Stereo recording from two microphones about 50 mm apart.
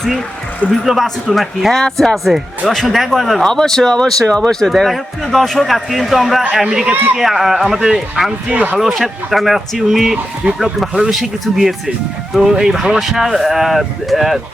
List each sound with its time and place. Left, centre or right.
0.6 s a man's voice: left
1.0 s speech: centre
3.4 s speech: centre
4.7 s speech: centre
10.4 s speech: right
11.1 s speech: centre